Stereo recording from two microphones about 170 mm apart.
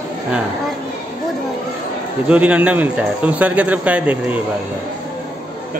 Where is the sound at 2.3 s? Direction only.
5° right (ahead or behind).